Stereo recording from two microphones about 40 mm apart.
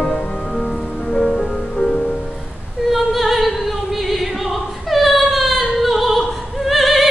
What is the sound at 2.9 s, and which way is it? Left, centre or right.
Opera, centre.